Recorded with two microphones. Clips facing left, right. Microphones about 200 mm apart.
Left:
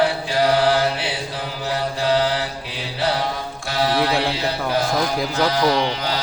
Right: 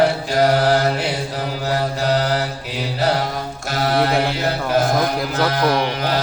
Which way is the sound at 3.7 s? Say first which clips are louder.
Right 1 dB; 50° right (ahead or behind).